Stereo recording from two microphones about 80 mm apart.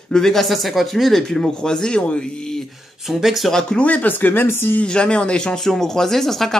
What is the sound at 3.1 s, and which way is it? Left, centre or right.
Speech, centre.